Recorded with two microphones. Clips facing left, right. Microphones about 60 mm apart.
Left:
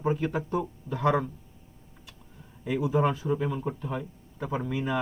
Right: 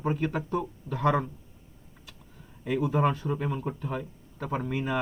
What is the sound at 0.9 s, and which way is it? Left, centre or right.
Speech, right.